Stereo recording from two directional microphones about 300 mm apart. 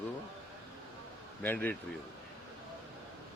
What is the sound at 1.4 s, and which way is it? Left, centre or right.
Speech, centre.